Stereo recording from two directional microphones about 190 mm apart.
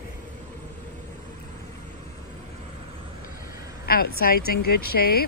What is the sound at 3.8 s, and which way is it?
Vehicle, 55° left (ahead or behind).